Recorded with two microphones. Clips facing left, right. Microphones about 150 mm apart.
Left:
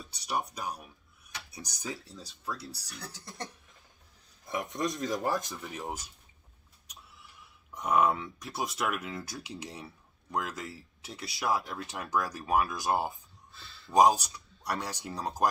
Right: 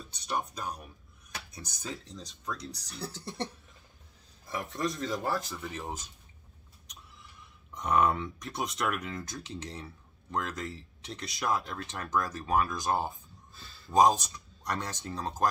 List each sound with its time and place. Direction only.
0.1 s speech: 10° left (ahead or behind)
4.5 s speech: 15° left (ahead or behind)
7.7 s speech: 5° left (ahead or behind)
13.5 s a sound: 40° right (ahead or behind)
13.9 s speech: 10° left (ahead or behind)